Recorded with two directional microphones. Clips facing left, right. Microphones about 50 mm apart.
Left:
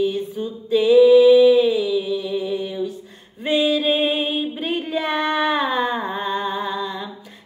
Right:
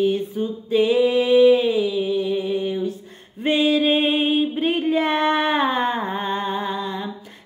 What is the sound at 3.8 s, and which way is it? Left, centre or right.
Music, right.